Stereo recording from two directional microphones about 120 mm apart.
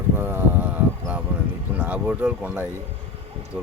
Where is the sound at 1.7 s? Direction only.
15° right (ahead or behind).